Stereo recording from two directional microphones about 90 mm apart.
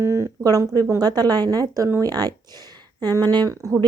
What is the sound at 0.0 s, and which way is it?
A woman's voice, 30° right (ahead or behind).